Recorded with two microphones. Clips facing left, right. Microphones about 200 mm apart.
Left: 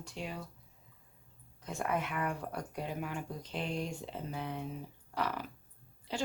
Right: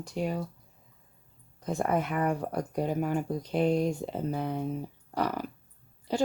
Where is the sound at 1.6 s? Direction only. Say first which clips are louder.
Right 7 dB; 40° right (ahead or behind).